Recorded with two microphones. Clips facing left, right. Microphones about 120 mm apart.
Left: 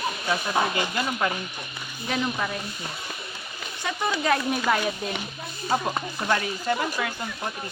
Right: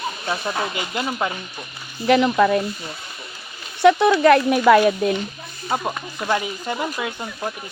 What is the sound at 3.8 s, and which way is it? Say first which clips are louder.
Speech: right 13 dB; 75° right (ahead or behind).